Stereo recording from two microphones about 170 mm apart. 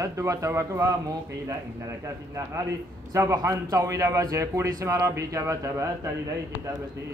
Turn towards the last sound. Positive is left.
turn(degrees=-20)  # may be behind; listen again after turning